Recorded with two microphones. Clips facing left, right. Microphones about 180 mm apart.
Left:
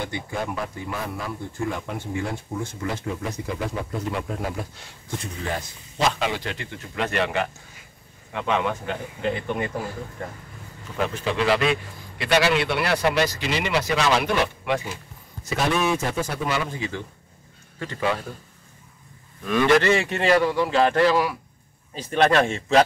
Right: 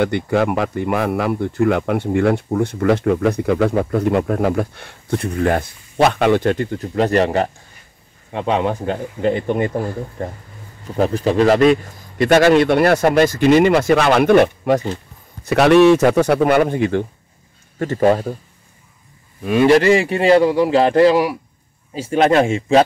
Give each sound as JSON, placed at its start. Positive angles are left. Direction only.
{"t": 0.0, "sound": "a man's voice", "side_deg": -75}
{"t": 15.4, "sound": "a man's voice", "side_deg": -70}
{"t": 17.7, "sound": "a man's voice", "side_deg": -45}
{"t": 19.5, "sound": "speech", "side_deg": -30}